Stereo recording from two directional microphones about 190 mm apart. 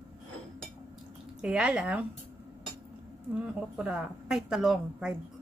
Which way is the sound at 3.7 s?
5° right (ahead or behind).